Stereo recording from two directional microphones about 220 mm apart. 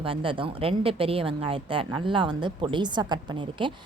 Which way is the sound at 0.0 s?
25° right (ahead or behind).